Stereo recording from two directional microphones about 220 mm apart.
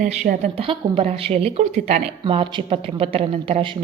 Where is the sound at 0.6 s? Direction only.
25° right (ahead or behind).